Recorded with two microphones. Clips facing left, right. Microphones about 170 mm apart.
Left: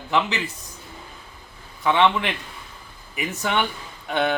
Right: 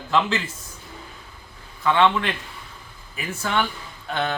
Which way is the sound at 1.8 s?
15° left (ahead or behind).